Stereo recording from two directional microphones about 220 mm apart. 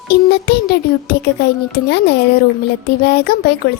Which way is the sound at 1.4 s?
50° left (ahead or behind).